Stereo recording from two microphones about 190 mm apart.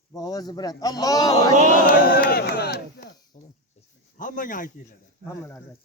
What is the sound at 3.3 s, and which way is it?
Speech, 40° left (ahead or behind).